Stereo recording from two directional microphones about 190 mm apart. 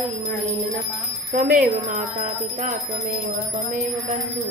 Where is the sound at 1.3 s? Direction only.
40° right (ahead or behind).